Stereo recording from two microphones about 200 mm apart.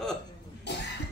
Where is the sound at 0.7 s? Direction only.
60° left (ahead or behind).